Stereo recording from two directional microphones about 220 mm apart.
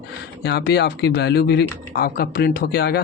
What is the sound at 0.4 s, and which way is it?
Speech, 50° left (ahead or behind).